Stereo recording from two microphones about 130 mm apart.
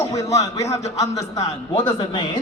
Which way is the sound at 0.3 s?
25° left (ahead or behind).